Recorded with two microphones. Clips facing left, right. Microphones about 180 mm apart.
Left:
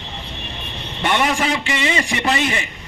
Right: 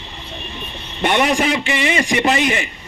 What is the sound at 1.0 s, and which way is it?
A man's voice, 20° right (ahead or behind).